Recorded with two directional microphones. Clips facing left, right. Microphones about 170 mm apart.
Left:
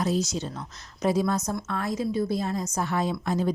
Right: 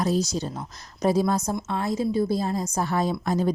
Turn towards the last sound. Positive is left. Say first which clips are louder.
# right 2 dB
turn(degrees=-40)  # may be behind; listen again after turning